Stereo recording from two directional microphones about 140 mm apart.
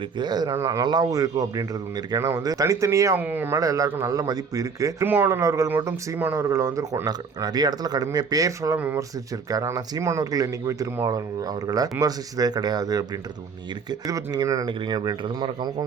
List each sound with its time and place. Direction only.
0.2 s speech: 30° right (ahead or behind); by 3.6 s 15° right (ahead or behind)
3.6 s speech: 25° right (ahead or behind)
9.5 s speech: 25° right (ahead or behind)
14.1 s speech: 25° right (ahead or behind)